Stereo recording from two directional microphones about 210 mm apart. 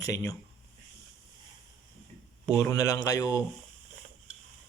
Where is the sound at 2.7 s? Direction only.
15° left (ahead or behind).